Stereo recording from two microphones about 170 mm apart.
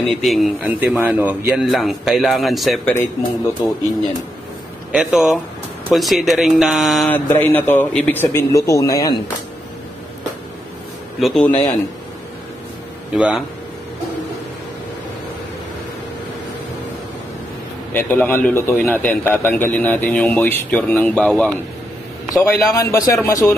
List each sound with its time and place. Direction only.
0.0 s a man's voice: centre (ahead or behind)
4.9 s a man's voice: centre (ahead or behind)
7.1 s a man's voice: 10° left (ahead or behind)
11.1 s a man's voice: centre (ahead or behind)
13.1 s a man's voice: 5° right (ahead or behind)
17.9 s a man's voice: 10° left (ahead or behind)
22.3 s a man's voice: 20° left (ahead or behind)